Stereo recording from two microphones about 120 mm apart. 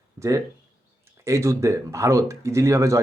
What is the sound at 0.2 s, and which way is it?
Speech, 25° right (ahead or behind).